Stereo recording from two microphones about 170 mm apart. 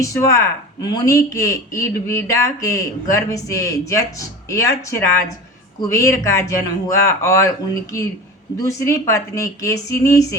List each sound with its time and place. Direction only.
0.0 s speech: 20° left (ahead or behind)
8.5 s speech: 20° left (ahead or behind)